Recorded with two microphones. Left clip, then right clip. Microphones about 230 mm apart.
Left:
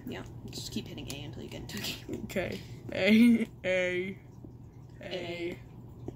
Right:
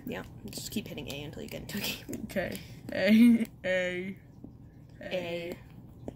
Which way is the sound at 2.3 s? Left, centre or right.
Centre.